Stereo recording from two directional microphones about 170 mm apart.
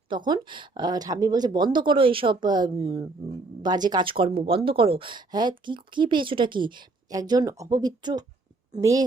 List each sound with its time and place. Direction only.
0.1 s speech: 25° right (ahead or behind)
3.6 s speech: 25° right (ahead or behind)